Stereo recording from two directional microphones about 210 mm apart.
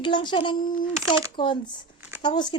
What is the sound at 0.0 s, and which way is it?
Speech, 20° left (ahead or behind).